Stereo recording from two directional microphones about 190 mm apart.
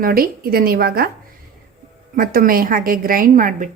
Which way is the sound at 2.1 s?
50° right (ahead or behind).